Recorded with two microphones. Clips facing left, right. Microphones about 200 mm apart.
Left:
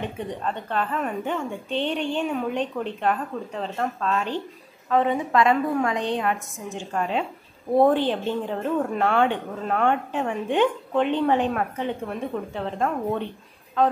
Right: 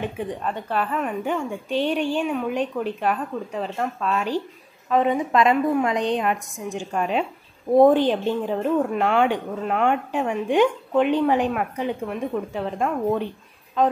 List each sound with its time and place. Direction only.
0.2 s a woman's voice: 10° right (ahead or behind)